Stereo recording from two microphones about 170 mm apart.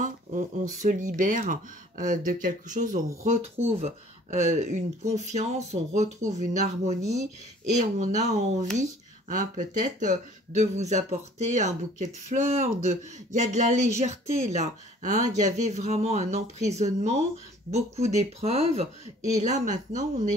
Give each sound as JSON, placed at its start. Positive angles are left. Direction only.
{"t": 0.0, "sound": "speech", "side_deg": -50}